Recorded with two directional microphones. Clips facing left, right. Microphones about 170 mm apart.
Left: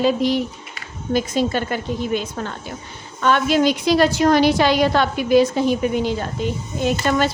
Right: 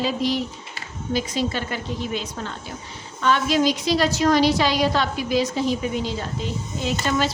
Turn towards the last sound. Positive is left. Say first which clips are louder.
# left 4 dB
turn(degrees=55)  # may be behind; listen again after turning